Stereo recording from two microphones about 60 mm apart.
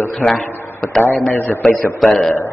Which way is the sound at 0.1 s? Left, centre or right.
Centre.